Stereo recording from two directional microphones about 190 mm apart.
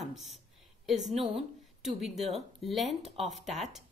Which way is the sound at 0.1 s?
Centre (ahead or behind).